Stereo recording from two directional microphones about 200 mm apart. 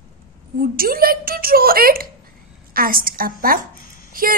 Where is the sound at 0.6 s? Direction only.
45° right (ahead or behind).